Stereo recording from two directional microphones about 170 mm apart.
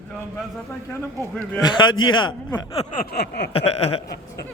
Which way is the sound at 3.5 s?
35° left (ahead or behind).